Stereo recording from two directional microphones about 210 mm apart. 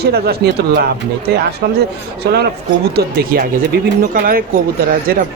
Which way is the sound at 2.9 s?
50° right (ahead or behind).